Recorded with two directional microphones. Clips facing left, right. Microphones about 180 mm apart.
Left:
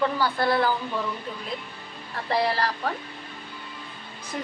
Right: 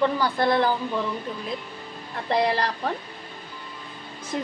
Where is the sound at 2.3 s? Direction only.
20° right (ahead or behind).